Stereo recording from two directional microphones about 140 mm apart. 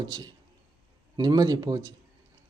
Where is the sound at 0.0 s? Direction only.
30° right (ahead or behind).